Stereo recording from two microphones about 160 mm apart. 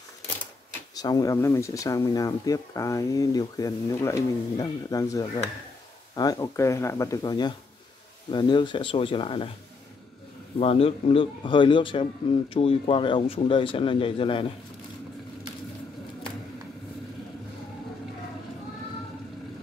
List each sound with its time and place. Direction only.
0.9 s a man's voice: 25° left (ahead or behind)
10.6 s a man's voice: 35° left (ahead or behind)